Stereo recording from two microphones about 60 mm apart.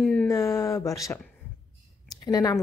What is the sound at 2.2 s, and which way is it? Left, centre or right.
Speech, left.